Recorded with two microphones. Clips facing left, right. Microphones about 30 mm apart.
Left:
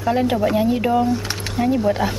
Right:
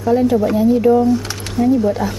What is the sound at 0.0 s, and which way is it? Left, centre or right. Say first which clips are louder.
Speech: right 4 dB; left.